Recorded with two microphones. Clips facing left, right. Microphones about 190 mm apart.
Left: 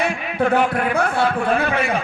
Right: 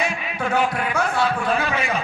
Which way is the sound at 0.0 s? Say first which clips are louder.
Left 3 dB; 55° left (ahead or behind).